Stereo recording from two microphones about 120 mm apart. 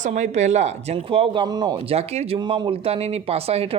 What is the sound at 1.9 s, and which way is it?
Speech, 60° right (ahead or behind).